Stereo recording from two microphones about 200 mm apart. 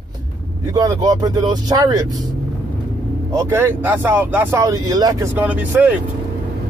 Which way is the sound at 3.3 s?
10° right (ahead or behind).